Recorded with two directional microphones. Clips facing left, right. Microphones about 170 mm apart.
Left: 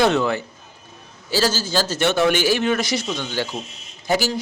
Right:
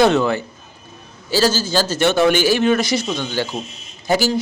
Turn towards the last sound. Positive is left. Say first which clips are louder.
# right 3 dB
turn(degrees=-35)  # may be behind; listen again after turning